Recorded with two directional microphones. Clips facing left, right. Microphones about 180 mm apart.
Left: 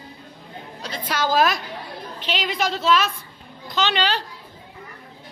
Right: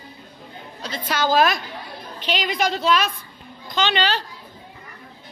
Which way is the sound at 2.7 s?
Centre (ahead or behind).